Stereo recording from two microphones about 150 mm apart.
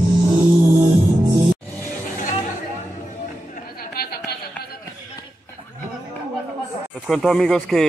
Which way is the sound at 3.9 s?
90° left.